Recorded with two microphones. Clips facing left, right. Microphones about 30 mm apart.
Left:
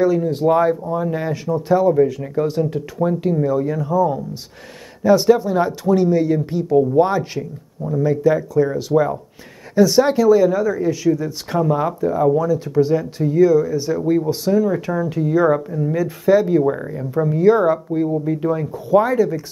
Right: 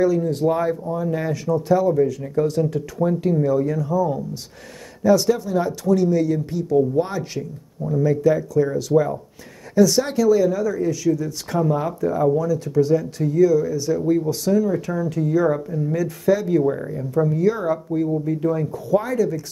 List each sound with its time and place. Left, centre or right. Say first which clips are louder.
0.0 s speech: left 2 dB; left
3.1 s speech: left 1 dB; centre